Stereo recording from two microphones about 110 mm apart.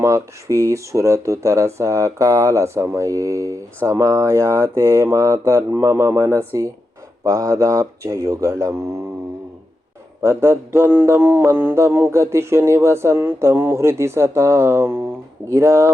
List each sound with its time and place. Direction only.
0.0 s speech: 25° right (ahead or behind)
10.2 s speech: 25° right (ahead or behind)